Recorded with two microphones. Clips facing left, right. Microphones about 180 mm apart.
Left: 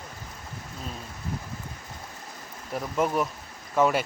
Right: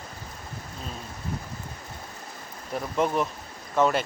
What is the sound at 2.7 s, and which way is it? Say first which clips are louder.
Speech: even; 5° left (ahead or behind).